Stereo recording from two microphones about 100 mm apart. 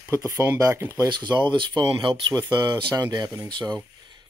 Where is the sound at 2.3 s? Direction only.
40° right (ahead or behind).